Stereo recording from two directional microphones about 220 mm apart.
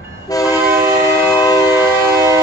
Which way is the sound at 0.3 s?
15° left (ahead or behind).